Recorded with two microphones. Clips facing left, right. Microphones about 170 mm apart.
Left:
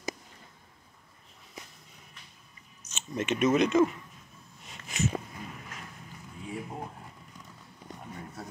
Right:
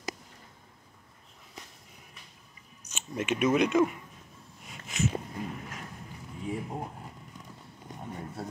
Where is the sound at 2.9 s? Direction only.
10° right (ahead or behind).